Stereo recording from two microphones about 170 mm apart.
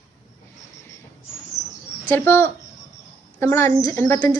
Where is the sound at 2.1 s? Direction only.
10° left (ahead or behind).